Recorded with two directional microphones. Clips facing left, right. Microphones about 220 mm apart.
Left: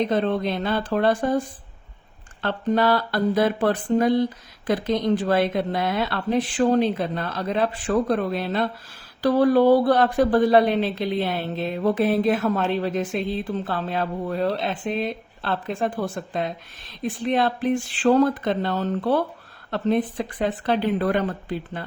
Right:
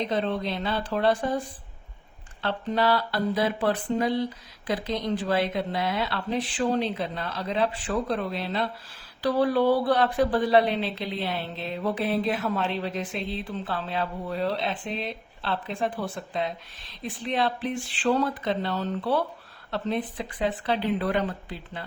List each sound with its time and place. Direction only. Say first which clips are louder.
0.1 s a woman's voice: left 5 dB; 50° left (ahead or behind)
2.4 s a woman's voice: left 4 dB; 50° left (ahead or behind)